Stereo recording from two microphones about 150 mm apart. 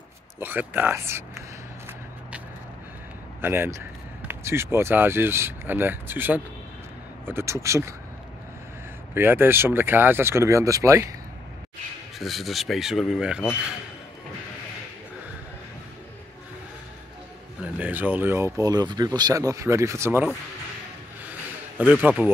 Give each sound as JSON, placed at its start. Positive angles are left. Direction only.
{"t": 0.4, "sound": "speech", "side_deg": -15}
{"t": 3.3, "sound": "speech", "side_deg": -15}
{"t": 9.1, "sound": "speech", "side_deg": -15}
{"t": 12.2, "sound": "speech", "side_deg": 0}
{"t": 17.7, "sound": "speech", "side_deg": -10}
{"t": 22.0, "sound": "speech", "side_deg": -10}